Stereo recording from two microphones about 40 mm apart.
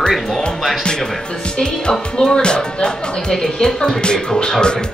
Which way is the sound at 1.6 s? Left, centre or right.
Centre.